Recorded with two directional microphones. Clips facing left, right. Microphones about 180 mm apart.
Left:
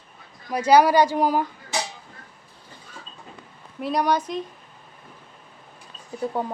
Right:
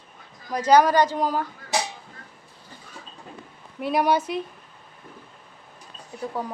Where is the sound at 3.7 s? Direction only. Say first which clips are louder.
Right 1 dB; 5° right (ahead or behind).